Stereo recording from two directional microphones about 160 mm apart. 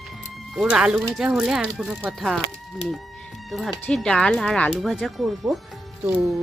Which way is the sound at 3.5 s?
Centre (ahead or behind).